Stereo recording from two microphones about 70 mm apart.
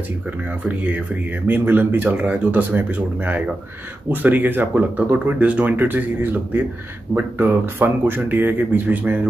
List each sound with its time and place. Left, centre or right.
0.7 s speech: right